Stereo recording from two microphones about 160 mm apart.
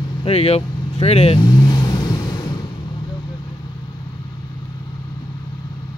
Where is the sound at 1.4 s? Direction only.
25° left (ahead or behind).